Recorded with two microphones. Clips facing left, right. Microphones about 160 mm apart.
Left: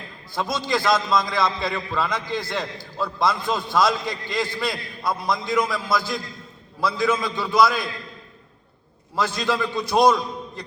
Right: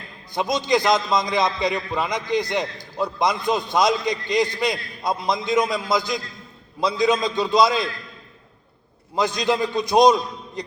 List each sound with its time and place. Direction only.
0.3 s a man's voice: 20° right (ahead or behind)
9.1 s a man's voice: 20° right (ahead or behind)